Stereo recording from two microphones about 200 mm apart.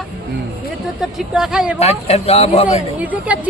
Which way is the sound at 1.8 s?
30° left (ahead or behind).